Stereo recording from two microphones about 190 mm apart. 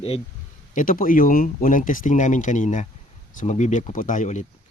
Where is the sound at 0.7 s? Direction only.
45° left (ahead or behind).